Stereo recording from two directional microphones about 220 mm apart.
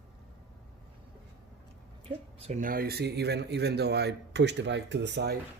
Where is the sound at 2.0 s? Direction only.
35° right (ahead or behind); by 5.4 s 50° right (ahead or behind).